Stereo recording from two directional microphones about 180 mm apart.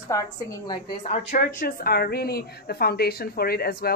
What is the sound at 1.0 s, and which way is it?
Speech, 35° left (ahead or behind).